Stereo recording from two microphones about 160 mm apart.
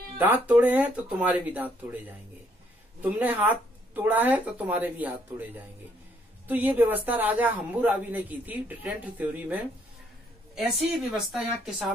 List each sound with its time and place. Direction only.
0.2 s speech: 10° right (ahead or behind)
3.0 s speech: 10° right (ahead or behind)
6.4 s a woman's voice: 10° right (ahead or behind)